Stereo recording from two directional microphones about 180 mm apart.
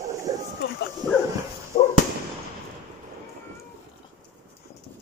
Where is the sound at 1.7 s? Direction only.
50° left (ahead or behind).